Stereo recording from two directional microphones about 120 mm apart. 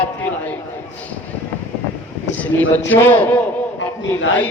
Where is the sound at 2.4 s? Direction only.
15° left (ahead or behind).